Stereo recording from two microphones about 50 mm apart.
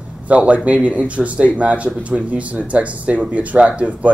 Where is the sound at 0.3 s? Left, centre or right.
Right.